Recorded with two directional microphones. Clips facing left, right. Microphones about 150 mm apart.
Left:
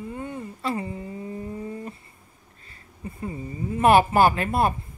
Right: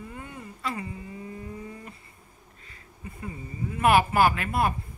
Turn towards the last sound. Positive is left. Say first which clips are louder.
# left 3 dB
turn(degrees=30)  # may be behind; listen again after turning